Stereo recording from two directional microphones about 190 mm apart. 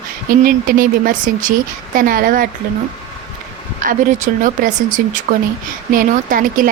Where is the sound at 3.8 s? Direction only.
45° right (ahead or behind).